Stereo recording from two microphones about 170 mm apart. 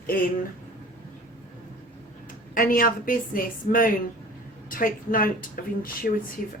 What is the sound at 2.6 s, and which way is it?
A woman's voice, 55° left (ahead or behind).